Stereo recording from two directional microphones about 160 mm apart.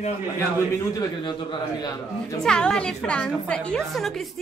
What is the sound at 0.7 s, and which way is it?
A man's voice, 25° left (ahead or behind).